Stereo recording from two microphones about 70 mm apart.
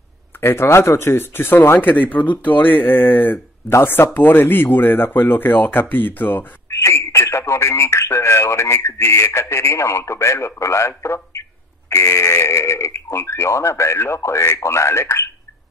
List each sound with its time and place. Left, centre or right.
0.4 s speech: left
6.7 s speech: left